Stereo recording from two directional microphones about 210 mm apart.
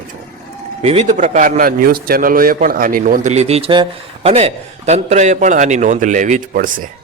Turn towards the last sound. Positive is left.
turn(degrees=-40)  # may be behind; listen again after turning